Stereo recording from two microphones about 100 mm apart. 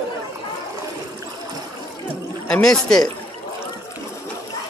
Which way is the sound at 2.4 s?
5° left (ahead or behind).